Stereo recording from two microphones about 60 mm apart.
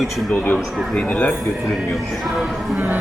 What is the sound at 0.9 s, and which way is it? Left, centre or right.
Speech, centre.